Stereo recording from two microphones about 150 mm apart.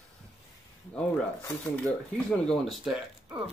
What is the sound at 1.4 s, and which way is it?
Speech, 10° left (ahead or behind).